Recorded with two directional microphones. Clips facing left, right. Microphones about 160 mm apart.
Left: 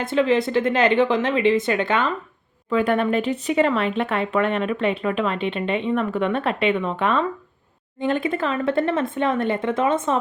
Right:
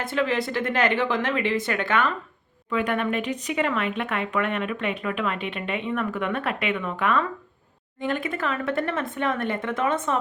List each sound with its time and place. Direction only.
0.0 s speech: 25° left (ahead or behind)
2.6 s speech: 35° left (ahead or behind)